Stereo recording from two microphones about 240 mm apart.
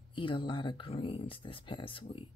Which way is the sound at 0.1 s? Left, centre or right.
Left.